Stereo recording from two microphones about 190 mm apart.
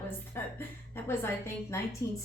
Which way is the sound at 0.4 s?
10° left (ahead or behind).